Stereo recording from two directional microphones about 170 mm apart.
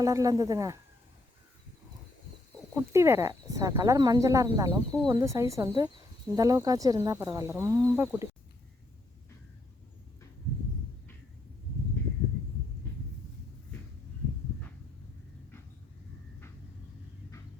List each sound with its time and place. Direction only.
0.0 s speech: 20° right (ahead or behind)
2.7 s speech: 15° right (ahead or behind)